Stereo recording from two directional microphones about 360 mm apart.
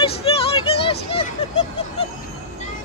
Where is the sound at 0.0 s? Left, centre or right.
Centre.